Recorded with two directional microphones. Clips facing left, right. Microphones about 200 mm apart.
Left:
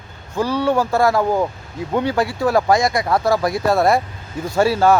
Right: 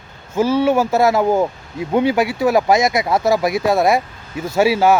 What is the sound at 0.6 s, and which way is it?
Speech, 20° right (ahead or behind).